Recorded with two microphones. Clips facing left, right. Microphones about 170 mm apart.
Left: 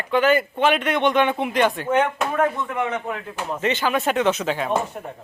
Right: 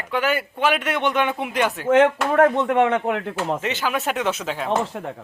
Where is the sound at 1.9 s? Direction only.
85° right.